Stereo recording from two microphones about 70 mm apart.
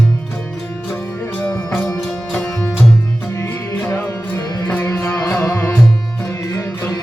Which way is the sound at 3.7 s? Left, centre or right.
Left.